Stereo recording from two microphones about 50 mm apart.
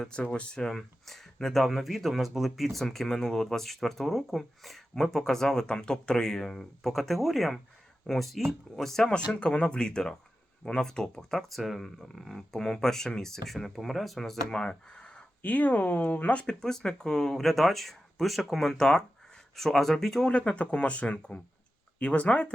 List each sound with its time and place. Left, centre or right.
0.1 s speech: left
0.7 s speech: centre
14.5 s speech: centre
15.4 s speech: left
16.5 s speech: centre
20.3 s speech: left